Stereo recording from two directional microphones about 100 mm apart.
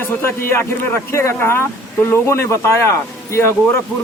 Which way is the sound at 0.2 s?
25° left (ahead or behind).